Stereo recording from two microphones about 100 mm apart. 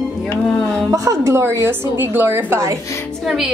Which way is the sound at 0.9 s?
35° right (ahead or behind).